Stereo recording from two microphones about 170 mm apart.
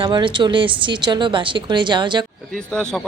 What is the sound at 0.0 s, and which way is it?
A woman's voice, 30° right (ahead or behind).